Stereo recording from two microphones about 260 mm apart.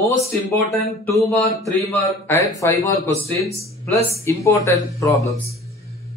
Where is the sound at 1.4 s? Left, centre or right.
Centre.